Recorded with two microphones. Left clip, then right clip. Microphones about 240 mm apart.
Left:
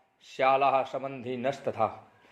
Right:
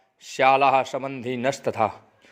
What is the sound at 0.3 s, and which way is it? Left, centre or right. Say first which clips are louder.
A man's voice: right 6 dB; right.